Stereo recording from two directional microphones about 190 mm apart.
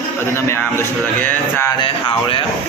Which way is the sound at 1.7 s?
25° left (ahead or behind).